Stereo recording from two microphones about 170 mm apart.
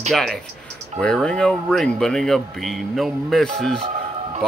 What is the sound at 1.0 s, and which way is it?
Speech, 5° left (ahead or behind).